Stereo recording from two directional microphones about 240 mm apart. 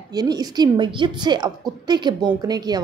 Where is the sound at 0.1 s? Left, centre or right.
Centre.